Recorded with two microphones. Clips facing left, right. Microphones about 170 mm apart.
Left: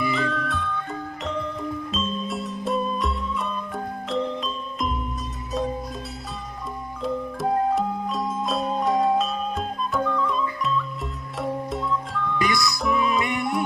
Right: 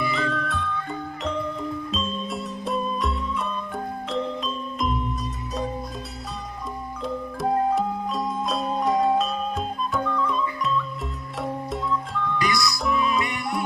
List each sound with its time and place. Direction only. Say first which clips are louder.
0.1 s music: left 1 dB; centre (ahead or behind)
1.9 s music: left 1 dB; centre (ahead or behind)
7.0 s music: left 2 dB; centre (ahead or behind)
13.2 s music: left 3 dB; 20° left (ahead or behind)